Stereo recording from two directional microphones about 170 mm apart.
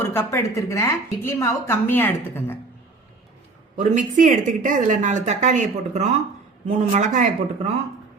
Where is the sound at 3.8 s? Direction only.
45° right (ahead or behind).